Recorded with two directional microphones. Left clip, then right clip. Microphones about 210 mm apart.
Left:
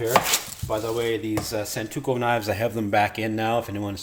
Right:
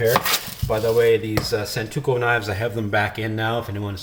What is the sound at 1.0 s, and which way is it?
Speech, 35° left (ahead or behind).